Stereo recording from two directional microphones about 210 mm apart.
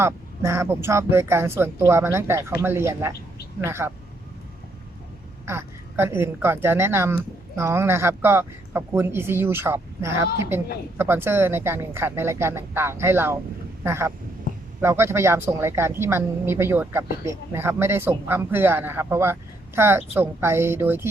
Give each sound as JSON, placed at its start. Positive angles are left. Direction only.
{"t": 0.0, "sound": "a woman's voice", "side_deg": -10}
{"t": 5.5, "sound": "a woman's voice", "side_deg": -10}